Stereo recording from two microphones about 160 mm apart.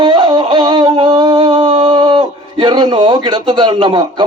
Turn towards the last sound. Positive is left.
turn(degrees=-30)  # may be behind; listen again after turning